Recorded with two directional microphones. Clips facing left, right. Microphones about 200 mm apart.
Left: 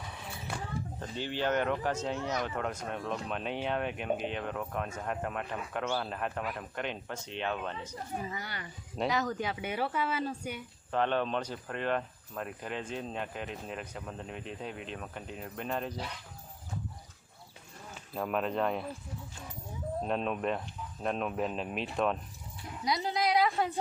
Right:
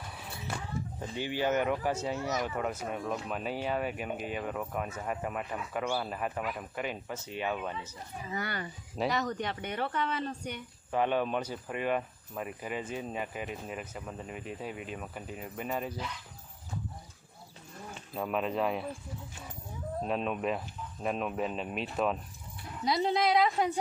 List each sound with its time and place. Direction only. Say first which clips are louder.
0.1 s a sound: even; centre (ahead or behind)
0.9 s speech: right 2 dB; 10° right (ahead or behind)
9.0 s speech: even; centre (ahead or behind)
10.9 s speech: right 1 dB; 10° right (ahead or behind)
18.1 s speech: even; centre (ahead or behind)
20.0 s speech: even; centre (ahead or behind)
22.8 s a woman's voice: right 3 dB; 25° right (ahead or behind)